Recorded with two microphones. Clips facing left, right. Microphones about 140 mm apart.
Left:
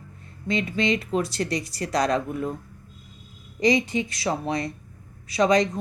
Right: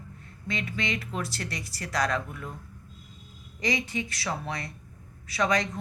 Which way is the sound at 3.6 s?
20° left (ahead or behind).